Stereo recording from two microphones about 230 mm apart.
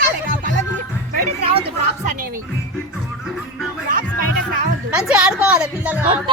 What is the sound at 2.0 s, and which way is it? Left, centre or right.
Music, right.